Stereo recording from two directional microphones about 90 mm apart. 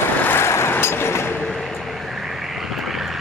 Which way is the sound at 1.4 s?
Centre (ahead or behind).